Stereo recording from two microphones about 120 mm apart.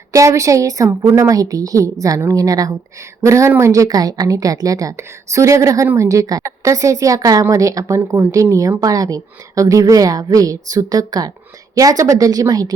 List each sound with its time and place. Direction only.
0.1 s speech: 25° right (ahead or behind)